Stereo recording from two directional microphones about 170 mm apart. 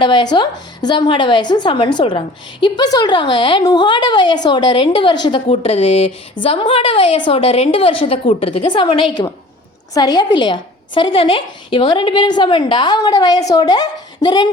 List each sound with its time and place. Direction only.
0.0 s a woman's voice: 25° left (ahead or behind)